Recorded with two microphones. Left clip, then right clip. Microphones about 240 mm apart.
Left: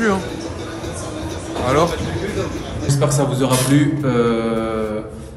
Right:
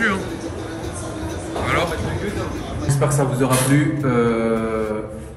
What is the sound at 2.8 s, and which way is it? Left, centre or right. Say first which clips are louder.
Speech: left 2 dB; centre.